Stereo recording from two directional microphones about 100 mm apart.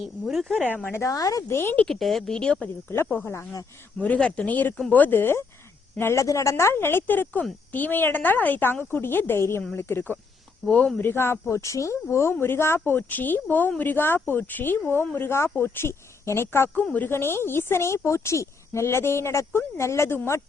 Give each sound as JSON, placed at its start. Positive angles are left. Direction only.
{"t": 0.3, "sound": "speech", "side_deg": 0}
{"t": 0.7, "sound": "speech", "side_deg": 20}
{"t": 1.9, "sound": "speech", "side_deg": 0}
{"t": 3.2, "sound": "speech", "side_deg": 30}
{"t": 4.0, "sound": "a woman's voice", "side_deg": 10}
{"t": 11.0, "sound": "speech", "side_deg": 25}